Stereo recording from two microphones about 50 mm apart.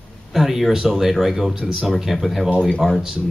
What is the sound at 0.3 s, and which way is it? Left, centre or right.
Speech, centre.